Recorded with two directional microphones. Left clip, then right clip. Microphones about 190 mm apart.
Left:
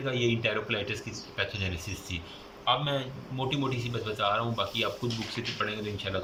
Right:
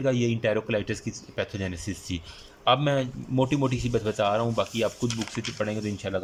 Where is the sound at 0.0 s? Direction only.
45° right (ahead or behind).